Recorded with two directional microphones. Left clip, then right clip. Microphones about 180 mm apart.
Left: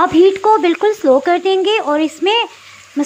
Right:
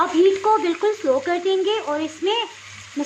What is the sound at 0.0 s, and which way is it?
Speech, 30° left (ahead or behind).